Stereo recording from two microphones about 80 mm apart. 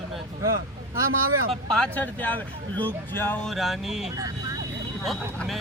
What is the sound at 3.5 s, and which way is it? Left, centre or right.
Speech, centre.